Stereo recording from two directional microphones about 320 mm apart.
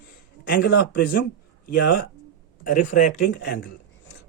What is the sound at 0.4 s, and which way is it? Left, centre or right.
A man's voice, left.